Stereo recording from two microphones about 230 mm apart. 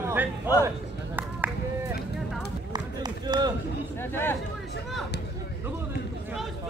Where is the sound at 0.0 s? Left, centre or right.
Centre.